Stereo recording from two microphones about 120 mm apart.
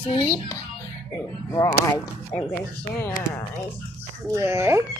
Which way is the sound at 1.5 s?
30° left (ahead or behind).